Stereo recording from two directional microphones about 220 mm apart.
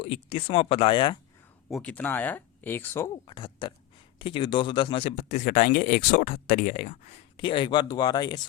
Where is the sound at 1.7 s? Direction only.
5° left (ahead or behind).